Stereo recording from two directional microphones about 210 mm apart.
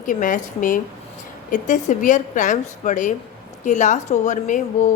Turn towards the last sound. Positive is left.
turn(degrees=35)  # may be behind; listen again after turning